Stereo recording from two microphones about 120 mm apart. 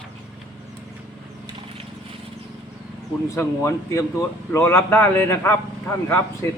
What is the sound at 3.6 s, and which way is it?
Speech, 25° left (ahead or behind).